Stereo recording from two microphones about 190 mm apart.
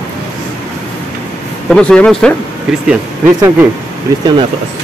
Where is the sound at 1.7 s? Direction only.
5° left (ahead or behind).